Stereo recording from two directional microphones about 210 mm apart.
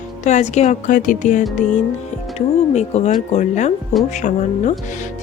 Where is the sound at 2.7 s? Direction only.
30° left (ahead or behind).